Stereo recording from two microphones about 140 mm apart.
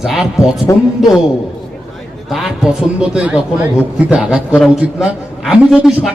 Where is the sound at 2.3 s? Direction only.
5° right (ahead or behind).